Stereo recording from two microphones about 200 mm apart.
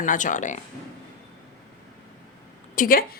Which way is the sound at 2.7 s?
45° left (ahead or behind).